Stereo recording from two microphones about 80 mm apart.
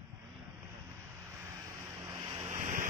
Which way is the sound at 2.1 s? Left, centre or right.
Right.